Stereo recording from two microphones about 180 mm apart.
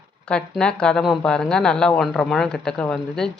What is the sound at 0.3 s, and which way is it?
Speech, 5° left (ahead or behind).